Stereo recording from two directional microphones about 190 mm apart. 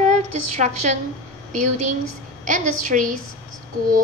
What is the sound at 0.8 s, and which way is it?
A woman's voice, 40° right (ahead or behind).